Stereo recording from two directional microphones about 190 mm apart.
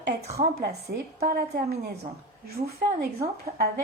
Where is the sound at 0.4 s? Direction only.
60° right (ahead or behind).